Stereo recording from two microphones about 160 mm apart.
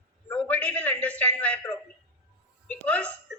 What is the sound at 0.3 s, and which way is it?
A man's voice, 10° left (ahead or behind).